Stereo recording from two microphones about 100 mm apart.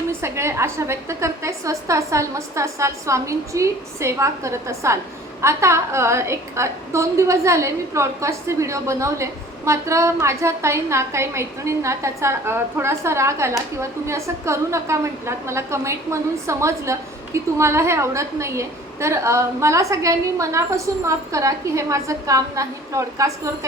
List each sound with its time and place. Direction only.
0.1 s a woman's voice: 25° right (ahead or behind)